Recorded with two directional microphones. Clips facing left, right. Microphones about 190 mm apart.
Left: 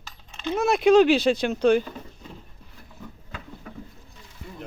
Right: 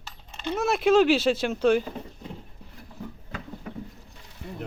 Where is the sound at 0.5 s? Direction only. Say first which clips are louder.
Left 3 dB; centre (ahead or behind).